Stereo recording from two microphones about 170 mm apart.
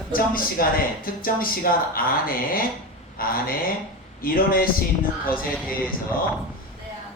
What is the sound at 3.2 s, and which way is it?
Speech, 60° left (ahead or behind).